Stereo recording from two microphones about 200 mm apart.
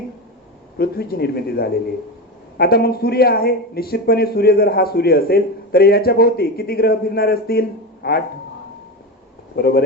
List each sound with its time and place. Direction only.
0.8 s speech: 50° left (ahead or behind)
9.6 s speech: 50° left (ahead or behind)